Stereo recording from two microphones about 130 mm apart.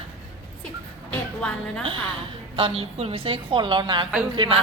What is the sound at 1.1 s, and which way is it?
Speech, 10° left (ahead or behind).